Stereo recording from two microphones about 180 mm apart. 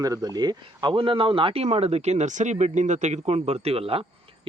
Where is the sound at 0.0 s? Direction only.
20° right (ahead or behind).